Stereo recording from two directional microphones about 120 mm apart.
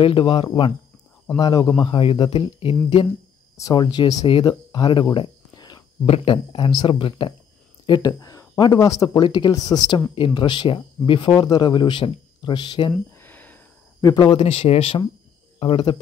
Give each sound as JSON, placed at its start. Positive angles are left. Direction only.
{"t": 0.0, "sound": "speech", "side_deg": 45}
{"t": 1.8, "sound": "speech", "side_deg": 45}
{"t": 3.5, "sound": "speech", "side_deg": 35}
{"t": 13.2, "sound": "a sound", "side_deg": 15}
{"t": 14.0, "sound": "speech", "side_deg": 35}
{"t": 14.4, "sound": "speech", "side_deg": 55}